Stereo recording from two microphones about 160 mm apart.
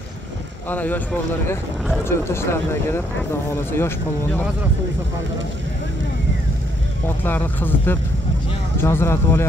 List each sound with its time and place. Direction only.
0.7 s speech: 10° left (ahead or behind)
2.0 s speech: 15° left (ahead or behind)
7.1 s speech: 10° left (ahead or behind)